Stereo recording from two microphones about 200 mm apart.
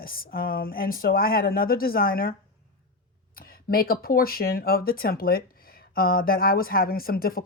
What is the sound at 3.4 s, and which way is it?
Speech, 45° left (ahead or behind).